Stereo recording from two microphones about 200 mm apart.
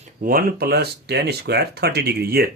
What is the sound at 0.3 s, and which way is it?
Speech, 45° right (ahead or behind).